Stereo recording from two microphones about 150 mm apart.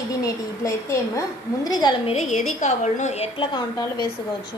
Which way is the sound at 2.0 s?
45° left (ahead or behind).